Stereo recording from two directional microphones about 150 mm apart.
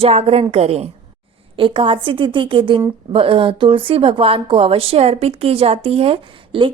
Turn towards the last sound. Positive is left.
turn(degrees=-40)  # may be behind; listen again after turning